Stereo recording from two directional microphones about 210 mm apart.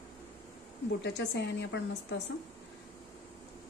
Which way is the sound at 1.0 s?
55° left (ahead or behind).